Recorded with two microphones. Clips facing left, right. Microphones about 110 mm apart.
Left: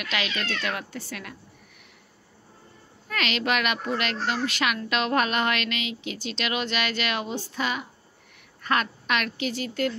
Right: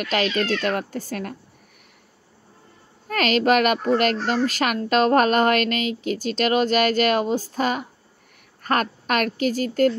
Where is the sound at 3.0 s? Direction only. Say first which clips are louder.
Right 8 dB; 45° right (ahead or behind).